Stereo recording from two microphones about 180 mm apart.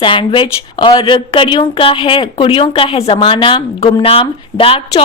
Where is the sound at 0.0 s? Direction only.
30° left (ahead or behind).